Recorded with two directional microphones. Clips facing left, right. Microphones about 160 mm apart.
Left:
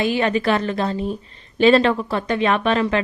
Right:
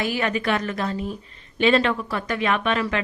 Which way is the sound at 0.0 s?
25° left (ahead or behind).